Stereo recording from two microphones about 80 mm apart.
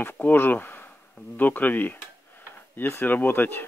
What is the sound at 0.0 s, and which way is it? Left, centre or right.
Speech, left.